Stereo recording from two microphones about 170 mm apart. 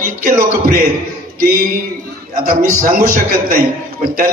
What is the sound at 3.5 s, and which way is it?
Speech, 55° right (ahead or behind).